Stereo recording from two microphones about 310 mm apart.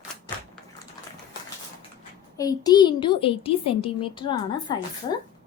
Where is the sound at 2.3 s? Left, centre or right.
Centre.